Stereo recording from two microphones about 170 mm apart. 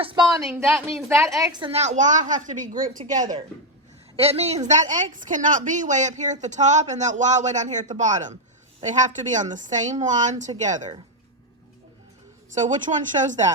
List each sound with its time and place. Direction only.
0.0 s speech: 30° right (ahead or behind)
0.5 s speech: 15° right (ahead or behind)
1.5 s speech: 30° right (ahead or behind)
1.8 s a woman's voice: 45° right (ahead or behind)
4.2 s a woman's voice: 35° right (ahead or behind)
12.5 s a woman's voice: 45° right (ahead or behind)